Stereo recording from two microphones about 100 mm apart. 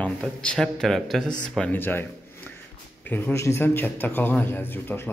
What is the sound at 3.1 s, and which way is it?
A man's voice, 20° left (ahead or behind).